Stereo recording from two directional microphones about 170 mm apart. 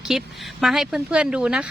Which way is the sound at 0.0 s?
Centre (ahead or behind).